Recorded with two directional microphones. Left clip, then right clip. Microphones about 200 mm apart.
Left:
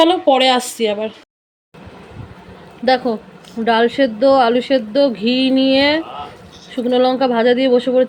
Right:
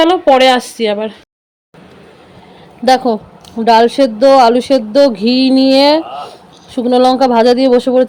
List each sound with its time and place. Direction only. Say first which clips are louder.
0.0 s speech: right 4 dB; 15° right (ahead or behind)
2.8 s speech: right 5 dB; 20° right (ahead or behind)